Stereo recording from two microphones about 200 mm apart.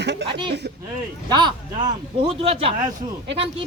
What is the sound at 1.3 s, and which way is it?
Speech, 20° right (ahead or behind).